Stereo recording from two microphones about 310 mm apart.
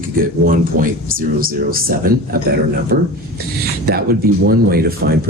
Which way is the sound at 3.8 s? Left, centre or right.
Right.